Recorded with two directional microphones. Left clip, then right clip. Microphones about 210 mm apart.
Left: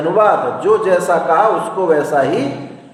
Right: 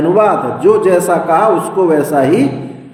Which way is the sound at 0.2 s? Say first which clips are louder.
Left 2 dB; 35° right (ahead or behind).